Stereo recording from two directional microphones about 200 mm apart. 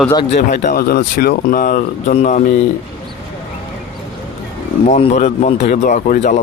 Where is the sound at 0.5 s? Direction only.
40° left (ahead or behind).